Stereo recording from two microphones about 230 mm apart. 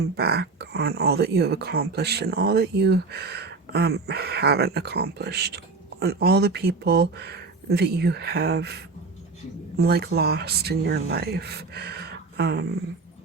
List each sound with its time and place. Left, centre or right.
0.0 s speech: right